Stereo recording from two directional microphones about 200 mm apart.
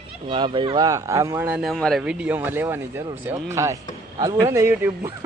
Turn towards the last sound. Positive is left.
turn(degrees=-15)  # may be behind; listen again after turning